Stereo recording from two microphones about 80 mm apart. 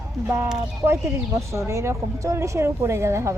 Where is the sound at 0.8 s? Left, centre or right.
Right.